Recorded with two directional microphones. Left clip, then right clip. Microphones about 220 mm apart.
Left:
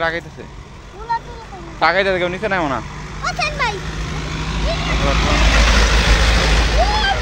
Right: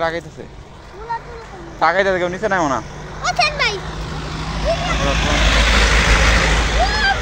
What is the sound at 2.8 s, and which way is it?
Vehicle, 55° left (ahead or behind).